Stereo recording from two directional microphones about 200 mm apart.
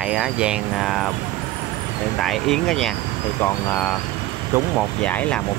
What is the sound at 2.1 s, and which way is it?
Speech, centre (ahead or behind).